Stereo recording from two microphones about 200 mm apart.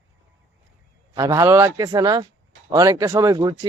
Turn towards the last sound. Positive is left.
turn(degrees=-15)  # may be behind; listen again after turning